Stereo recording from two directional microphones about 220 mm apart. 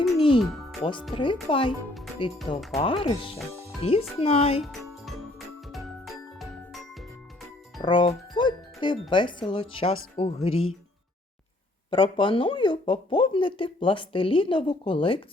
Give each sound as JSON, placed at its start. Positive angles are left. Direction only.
{"t": 0.3, "sound": "music", "side_deg": 0}
{"t": 0.8, "sound": "speech", "side_deg": 20}
{"t": 5.0, "sound": "music", "side_deg": 0}
{"t": 7.8, "sound": "speech", "side_deg": 20}
{"t": 11.9, "sound": "speech", "side_deg": 25}